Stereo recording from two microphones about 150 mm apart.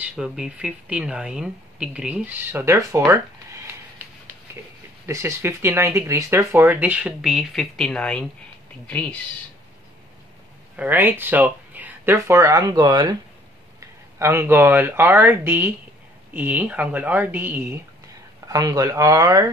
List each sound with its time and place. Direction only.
0.0 s speech: 5° right (ahead or behind)
5.0 s speech: 15° right (ahead or behind); by 9.1 s 10° left (ahead or behind)
10.8 s speech: 15° right (ahead or behind); by 13.1 s 30° right (ahead or behind)
13.7 s speech: 20° right (ahead or behind)
18.5 s speech: 25° right (ahead or behind)